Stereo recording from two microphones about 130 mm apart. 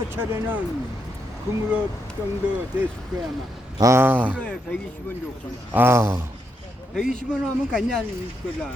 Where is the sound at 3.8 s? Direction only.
20° right (ahead or behind).